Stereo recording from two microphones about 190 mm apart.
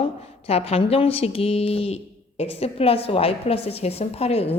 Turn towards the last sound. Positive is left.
turn(degrees=30)  # may be behind; listen again after turning